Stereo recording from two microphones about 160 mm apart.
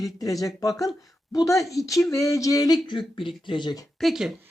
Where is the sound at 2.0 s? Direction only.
20° left (ahead or behind).